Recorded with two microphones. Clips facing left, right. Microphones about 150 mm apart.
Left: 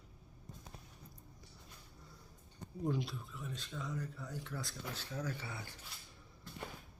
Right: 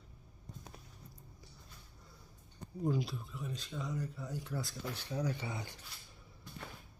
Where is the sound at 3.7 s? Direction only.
20° right (ahead or behind).